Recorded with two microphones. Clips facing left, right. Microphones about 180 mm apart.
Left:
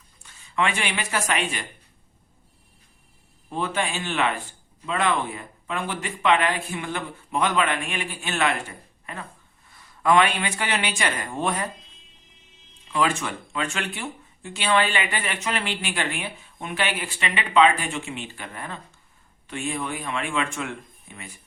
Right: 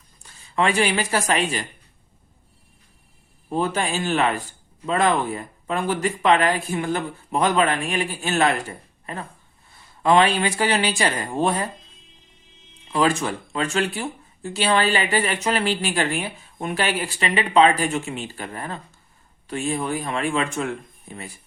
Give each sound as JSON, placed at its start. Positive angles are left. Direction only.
{"t": 0.2, "sound": "speech", "side_deg": -35}
{"t": 3.5, "sound": "speech", "side_deg": -40}
{"t": 12.9, "sound": "speech", "side_deg": -35}